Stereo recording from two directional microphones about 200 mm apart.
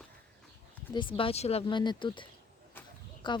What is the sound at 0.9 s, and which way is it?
Speech, 25° left (ahead or behind).